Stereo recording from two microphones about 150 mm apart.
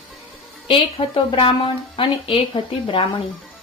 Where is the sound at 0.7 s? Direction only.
35° left (ahead or behind).